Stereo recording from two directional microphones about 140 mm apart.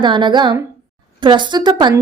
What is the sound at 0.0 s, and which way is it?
A woman's voice, 35° right (ahead or behind).